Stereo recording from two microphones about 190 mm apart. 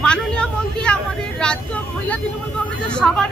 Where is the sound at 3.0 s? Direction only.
5° left (ahead or behind).